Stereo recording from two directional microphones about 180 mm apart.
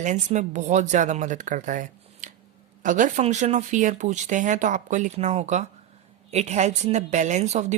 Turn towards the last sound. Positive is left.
turn(degrees=-40)  # may be behind; listen again after turning